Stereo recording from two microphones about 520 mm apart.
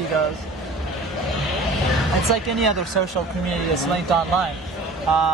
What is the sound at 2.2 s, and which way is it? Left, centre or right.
Speech, right.